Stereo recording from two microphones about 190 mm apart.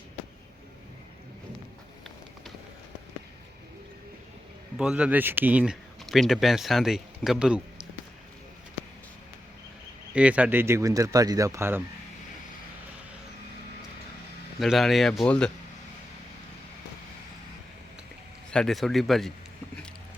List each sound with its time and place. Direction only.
4.8 s speech: 5° right (ahead or behind)
10.2 s speech: 5° right (ahead or behind)
14.6 s speech: centre (ahead or behind)
18.5 s speech: centre (ahead or behind)